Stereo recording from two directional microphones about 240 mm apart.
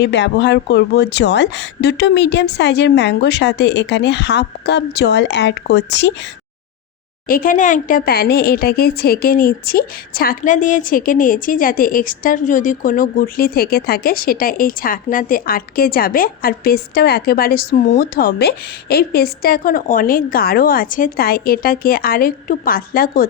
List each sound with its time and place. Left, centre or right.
0.0 s speech: left
7.3 s speech: left